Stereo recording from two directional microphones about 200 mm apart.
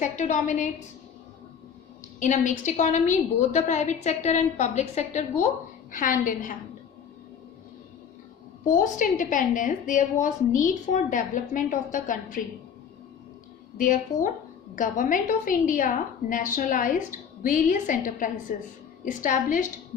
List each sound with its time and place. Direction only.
0.0 s a woman's voice: 40° left (ahead or behind)
2.1 s a woman's voice: 40° left (ahead or behind)
8.6 s a woman's voice: 40° left (ahead or behind)
13.8 s a woman's voice: 40° left (ahead or behind)